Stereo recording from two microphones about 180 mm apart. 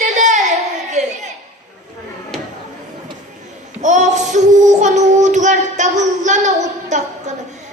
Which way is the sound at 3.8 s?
45° right (ahead or behind).